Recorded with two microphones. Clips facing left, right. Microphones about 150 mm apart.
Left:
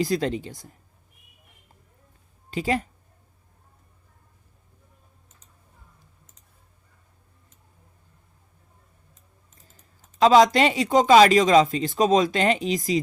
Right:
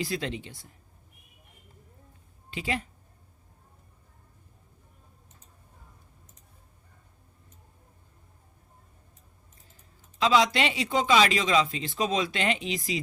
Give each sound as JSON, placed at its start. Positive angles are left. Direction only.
{"t": 0.0, "sound": "speech", "side_deg": 40}
{"t": 2.5, "sound": "speech", "side_deg": 40}
{"t": 10.2, "sound": "speech", "side_deg": 45}